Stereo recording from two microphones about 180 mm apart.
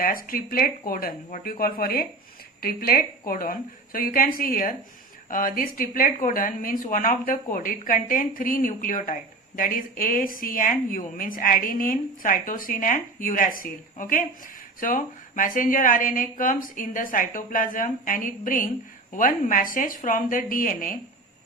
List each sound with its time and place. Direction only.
0.0 s a woman's voice: 50° left (ahead or behind)